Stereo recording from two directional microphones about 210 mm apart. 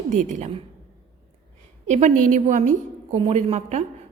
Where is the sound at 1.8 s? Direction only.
35° right (ahead or behind).